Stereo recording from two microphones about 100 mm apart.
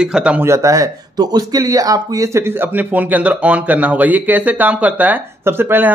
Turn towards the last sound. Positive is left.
turn(degrees=-20)  # may be behind; listen again after turning